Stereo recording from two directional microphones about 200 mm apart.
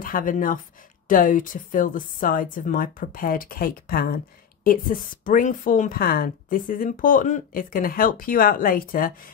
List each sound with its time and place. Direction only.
0.0 s speech: 45° left (ahead or behind)